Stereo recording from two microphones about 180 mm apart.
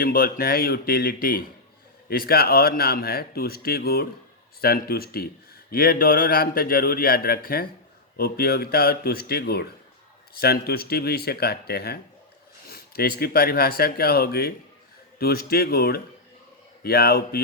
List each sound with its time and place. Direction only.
0.0 s speech: 55° left (ahead or behind)